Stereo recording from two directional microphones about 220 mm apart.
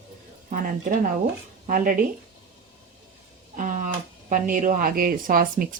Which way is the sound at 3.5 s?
35° right (ahead or behind).